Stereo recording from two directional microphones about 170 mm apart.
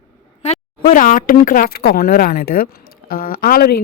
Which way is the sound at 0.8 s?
50° left (ahead or behind).